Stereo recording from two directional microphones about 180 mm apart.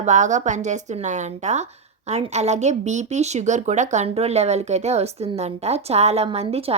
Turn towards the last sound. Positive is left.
turn(degrees=-35)  # may be behind; listen again after turning